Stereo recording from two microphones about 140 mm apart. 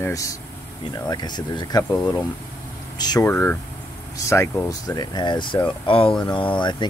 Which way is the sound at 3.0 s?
30° left (ahead or behind).